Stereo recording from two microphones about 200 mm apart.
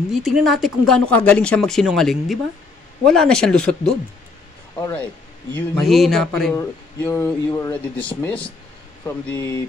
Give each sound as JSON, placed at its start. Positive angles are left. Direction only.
{"t": 0.1, "sound": "speech", "side_deg": 0}
{"t": 4.7, "sound": "speech", "side_deg": 15}
{"t": 6.5, "sound": "speech", "side_deg": 15}